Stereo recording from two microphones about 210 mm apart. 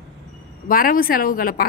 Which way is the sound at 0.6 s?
45° left (ahead or behind).